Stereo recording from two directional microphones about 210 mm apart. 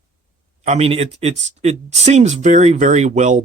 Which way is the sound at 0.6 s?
30° right (ahead or behind).